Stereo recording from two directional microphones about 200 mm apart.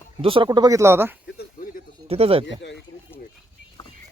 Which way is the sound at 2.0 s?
30° right (ahead or behind).